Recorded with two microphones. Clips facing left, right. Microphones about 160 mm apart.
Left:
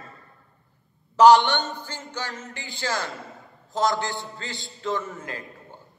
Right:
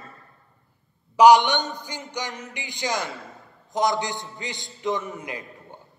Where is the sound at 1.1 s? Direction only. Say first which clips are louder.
Even; 15° right (ahead or behind).